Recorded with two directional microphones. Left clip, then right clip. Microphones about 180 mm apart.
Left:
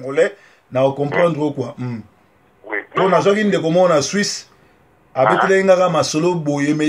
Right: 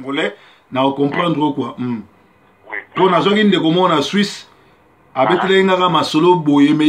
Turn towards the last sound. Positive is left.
turn(degrees=50)  # may be behind; listen again after turning